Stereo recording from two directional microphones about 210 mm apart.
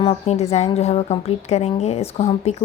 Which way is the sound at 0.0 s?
30° left (ahead or behind).